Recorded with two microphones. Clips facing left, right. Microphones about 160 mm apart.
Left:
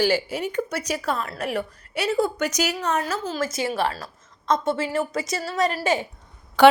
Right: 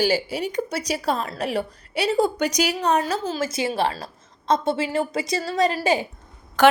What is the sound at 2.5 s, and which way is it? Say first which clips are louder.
Speech: right 3 dB; 15° right (ahead or behind).